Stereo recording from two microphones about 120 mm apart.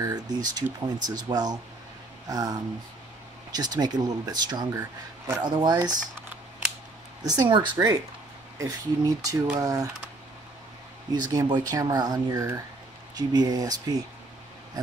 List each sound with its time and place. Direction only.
0.0 s speech: 30° right (ahead or behind)
7.2 s speech: 35° right (ahead or behind)
11.1 s speech: 35° right (ahead or behind)